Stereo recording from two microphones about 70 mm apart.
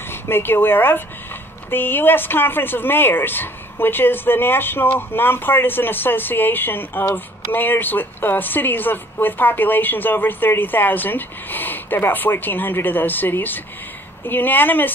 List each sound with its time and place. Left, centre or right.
0.1 s speech: left